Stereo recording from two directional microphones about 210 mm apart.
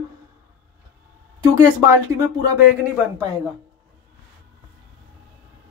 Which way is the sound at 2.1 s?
15° right (ahead or behind).